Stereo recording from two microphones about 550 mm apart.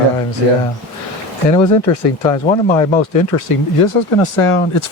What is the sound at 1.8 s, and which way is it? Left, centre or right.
Speech, left.